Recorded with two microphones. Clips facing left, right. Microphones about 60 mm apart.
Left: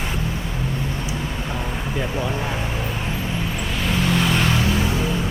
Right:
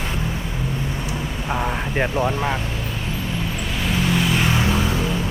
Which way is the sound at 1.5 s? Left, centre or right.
Right.